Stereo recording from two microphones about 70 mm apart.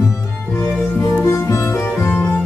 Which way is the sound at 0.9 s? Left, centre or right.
Left.